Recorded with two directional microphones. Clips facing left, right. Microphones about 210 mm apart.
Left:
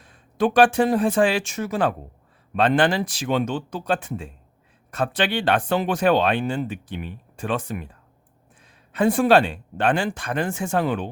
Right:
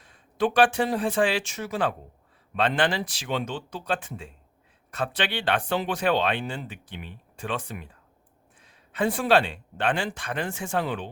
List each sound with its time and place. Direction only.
0.0 s speech: 45° left (ahead or behind)
8.9 s speech: 45° left (ahead or behind)